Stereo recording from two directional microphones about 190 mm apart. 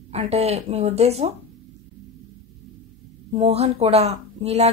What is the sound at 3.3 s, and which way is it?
A woman's voice, 30° right (ahead or behind).